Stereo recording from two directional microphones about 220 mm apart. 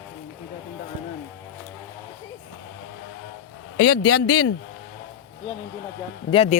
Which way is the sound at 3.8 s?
90° left.